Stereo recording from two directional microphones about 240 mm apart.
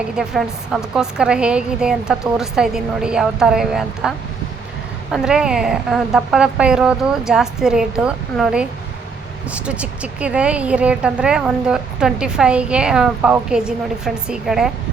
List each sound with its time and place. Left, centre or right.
0.2 s a woman's voice: centre
5.1 s a woman's voice: centre